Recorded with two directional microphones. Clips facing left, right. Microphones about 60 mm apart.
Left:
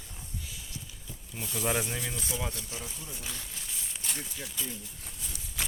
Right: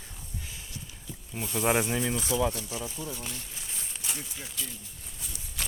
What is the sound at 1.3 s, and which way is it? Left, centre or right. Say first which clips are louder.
Speech: right 5 dB; right.